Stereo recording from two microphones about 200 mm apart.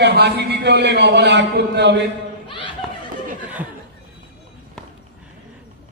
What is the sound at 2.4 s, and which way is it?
Laughter, 25° left (ahead or behind).